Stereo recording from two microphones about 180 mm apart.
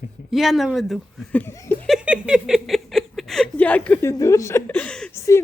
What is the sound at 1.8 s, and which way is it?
Speech, 5° right (ahead or behind).